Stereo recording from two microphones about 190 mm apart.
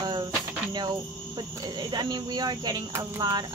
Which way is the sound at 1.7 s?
20° right (ahead or behind).